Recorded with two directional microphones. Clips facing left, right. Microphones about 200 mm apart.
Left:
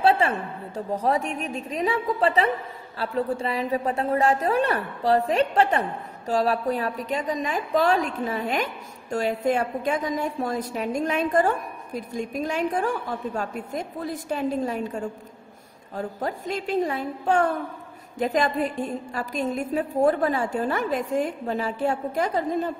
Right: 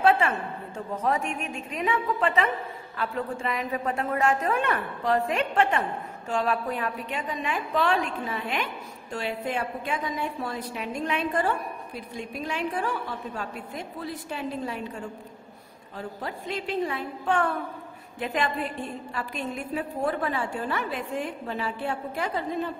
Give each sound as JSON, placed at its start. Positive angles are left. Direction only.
{"t": 0.0, "sound": "a woman's voice", "side_deg": 35}